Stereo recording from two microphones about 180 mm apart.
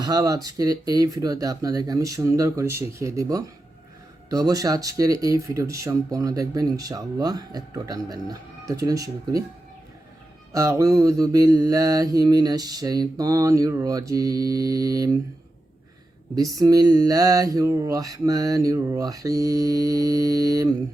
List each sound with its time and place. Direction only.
0.0 s speech: 20° right (ahead or behind)
10.5 s speech: 15° right (ahead or behind)
16.3 s speech: 20° right (ahead or behind)